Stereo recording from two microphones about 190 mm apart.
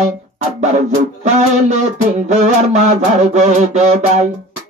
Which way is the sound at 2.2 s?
40° right (ahead or behind).